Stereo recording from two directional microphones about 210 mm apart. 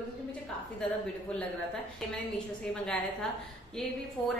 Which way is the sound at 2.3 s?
5° left (ahead or behind).